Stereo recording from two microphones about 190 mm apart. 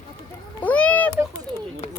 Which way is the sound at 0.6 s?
5° left (ahead or behind).